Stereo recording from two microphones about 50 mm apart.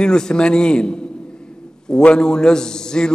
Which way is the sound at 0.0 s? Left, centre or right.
Centre.